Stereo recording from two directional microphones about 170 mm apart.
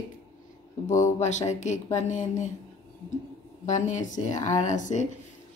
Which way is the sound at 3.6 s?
45° left (ahead or behind).